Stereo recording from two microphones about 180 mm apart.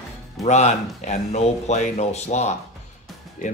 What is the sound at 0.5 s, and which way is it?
Speech, 40° left (ahead or behind).